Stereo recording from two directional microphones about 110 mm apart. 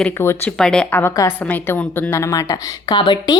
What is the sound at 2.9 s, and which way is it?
Speech, 45° left (ahead or behind).